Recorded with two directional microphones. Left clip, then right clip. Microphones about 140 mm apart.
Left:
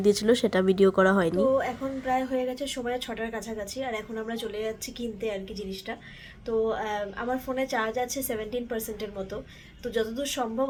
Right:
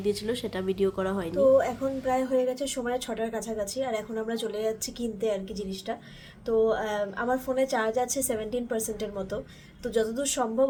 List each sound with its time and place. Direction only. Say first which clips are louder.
0.0 s speech: left 7 dB; 40° left (ahead or behind)
1.4 s a woman's voice: right 3 dB; 5° right (ahead or behind)